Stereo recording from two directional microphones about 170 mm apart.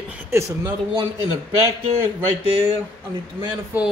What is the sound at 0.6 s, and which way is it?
Speech, 25° right (ahead or behind).